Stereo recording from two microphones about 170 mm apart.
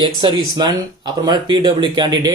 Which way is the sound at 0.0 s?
30° right (ahead or behind).